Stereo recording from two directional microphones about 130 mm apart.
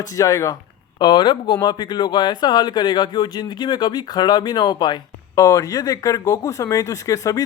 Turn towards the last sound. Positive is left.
turn(degrees=25)  # may be behind; listen again after turning